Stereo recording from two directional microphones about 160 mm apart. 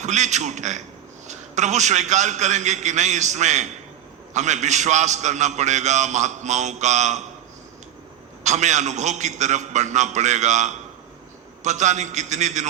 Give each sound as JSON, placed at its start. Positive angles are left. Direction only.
{"t": 0.0, "sound": "a man's voice", "side_deg": -45}
{"t": 8.4, "sound": "a man's voice", "side_deg": -45}